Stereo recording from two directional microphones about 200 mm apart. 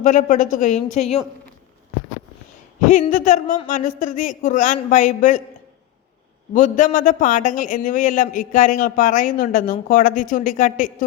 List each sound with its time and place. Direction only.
0.0 s a man's voice: 40° left (ahead or behind)
2.8 s a man's voice: 40° left (ahead or behind)
6.5 s a man's voice: 40° left (ahead or behind)